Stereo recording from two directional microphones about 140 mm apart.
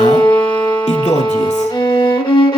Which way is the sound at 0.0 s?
30° left (ahead or behind).